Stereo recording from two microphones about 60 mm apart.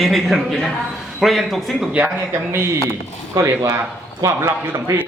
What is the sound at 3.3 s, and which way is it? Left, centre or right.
A man's voice, right.